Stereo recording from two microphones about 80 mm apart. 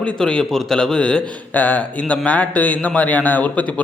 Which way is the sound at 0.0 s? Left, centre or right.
Centre.